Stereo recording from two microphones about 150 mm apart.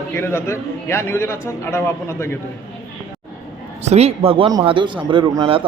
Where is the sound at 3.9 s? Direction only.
45° right (ahead or behind).